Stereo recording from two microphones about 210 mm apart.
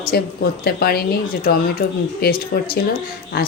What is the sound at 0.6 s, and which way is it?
Speech, 45° left (ahead or behind).